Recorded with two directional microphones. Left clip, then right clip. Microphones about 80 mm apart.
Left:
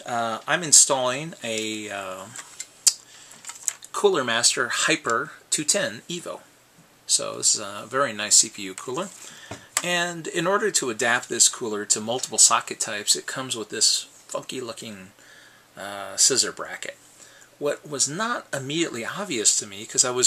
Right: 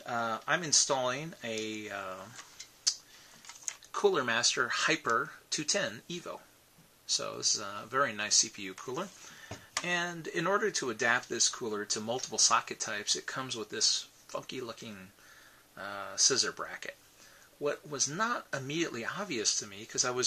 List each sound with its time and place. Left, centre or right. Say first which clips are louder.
0.0 s speech: left 7 dB; left
3.9 s speech: left 7 dB; left
9.8 s speech: left 8 dB; left